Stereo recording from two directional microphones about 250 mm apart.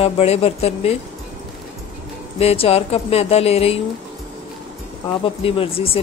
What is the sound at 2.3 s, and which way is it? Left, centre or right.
Speech, left.